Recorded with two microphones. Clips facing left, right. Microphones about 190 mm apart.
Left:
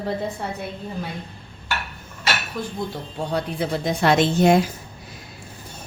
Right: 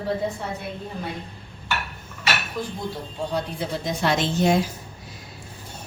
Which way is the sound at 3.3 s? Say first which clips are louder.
Left 4 dB; 60° left (ahead or behind).